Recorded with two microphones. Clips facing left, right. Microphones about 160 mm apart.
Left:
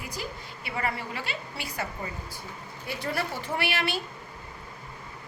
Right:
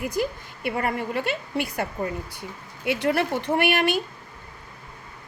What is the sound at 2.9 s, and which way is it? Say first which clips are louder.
Speech: right 9 dB; 80° right.